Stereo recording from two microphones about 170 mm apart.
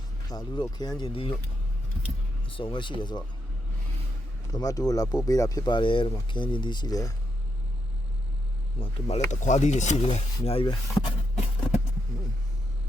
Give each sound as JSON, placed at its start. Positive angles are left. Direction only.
{"t": 0.3, "sound": "speech", "side_deg": 25}
{"t": 2.5, "sound": "speech", "side_deg": 30}
{"t": 4.5, "sound": "speech", "side_deg": 20}
{"t": 8.8, "sound": "speech", "side_deg": 40}